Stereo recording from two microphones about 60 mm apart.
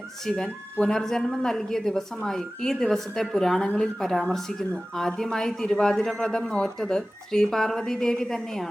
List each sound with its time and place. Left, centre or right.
0.3 s a woman's voice: centre